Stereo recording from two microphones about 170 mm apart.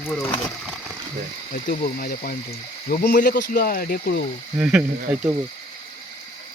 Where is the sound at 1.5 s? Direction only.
55° left (ahead or behind).